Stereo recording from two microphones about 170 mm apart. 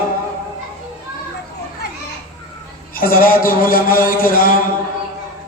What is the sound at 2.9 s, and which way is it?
A man's voice, 60° left (ahead or behind).